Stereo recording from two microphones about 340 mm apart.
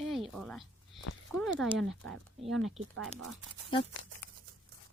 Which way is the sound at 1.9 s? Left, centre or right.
Right.